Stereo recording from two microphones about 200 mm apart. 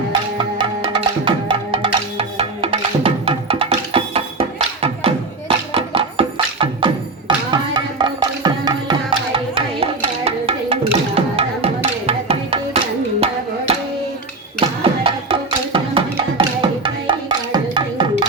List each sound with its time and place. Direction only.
0.1 s music: 25° right (ahead or behind)